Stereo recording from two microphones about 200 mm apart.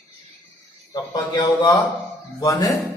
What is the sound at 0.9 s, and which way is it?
A man's voice, 20° left (ahead or behind).